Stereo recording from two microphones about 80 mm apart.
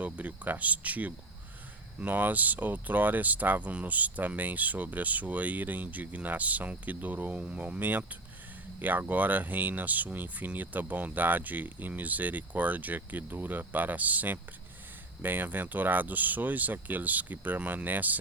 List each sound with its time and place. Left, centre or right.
0.0 s speech: centre